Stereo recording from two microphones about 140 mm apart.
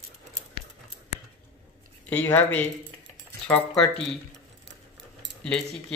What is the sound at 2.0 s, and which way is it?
Speech, 15° left (ahead or behind).